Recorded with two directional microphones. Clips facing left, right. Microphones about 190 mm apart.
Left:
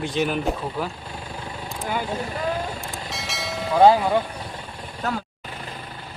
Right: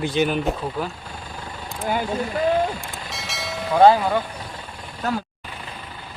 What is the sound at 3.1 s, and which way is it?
Train, centre (ahead or behind).